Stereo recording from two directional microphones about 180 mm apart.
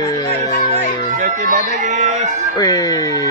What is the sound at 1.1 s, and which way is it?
Speech, 45° right (ahead or behind).